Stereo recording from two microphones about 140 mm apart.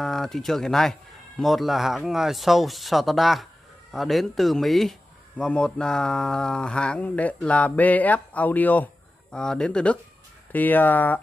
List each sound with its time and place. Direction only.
0.0 s speech: centre (ahead or behind)